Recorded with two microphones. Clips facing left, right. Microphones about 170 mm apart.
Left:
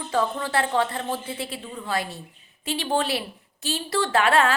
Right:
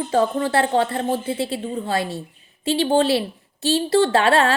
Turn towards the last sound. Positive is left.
turn(degrees=-30)  # may be behind; listen again after turning